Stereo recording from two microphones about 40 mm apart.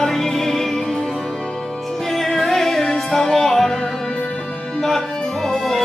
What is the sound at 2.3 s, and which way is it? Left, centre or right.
Music, centre.